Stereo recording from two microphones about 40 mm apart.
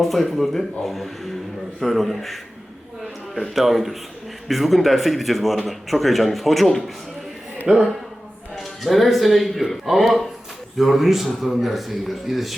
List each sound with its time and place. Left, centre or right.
0.0 s speech: centre
7.7 s speech: centre
8.5 s speech: centre